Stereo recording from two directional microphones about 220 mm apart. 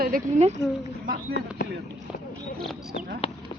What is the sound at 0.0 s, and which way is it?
Speech, 35° right (ahead or behind).